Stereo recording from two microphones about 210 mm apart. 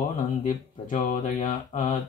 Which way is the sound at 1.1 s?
40° left (ahead or behind).